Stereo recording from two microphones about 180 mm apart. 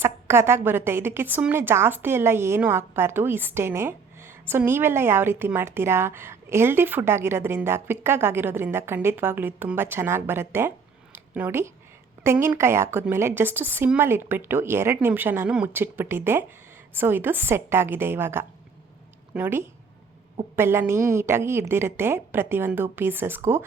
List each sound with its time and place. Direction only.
0.0 s a woman's voice: 15° right (ahead or behind)
11.1 s a sound: 10° right (ahead or behind)
12.2 s a woman's voice: 15° right (ahead or behind)